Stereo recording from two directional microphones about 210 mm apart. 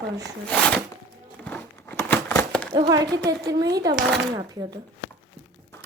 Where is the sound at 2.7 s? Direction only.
20° right (ahead or behind).